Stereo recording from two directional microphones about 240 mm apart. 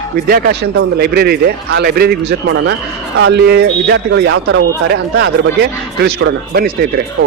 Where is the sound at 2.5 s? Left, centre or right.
Right.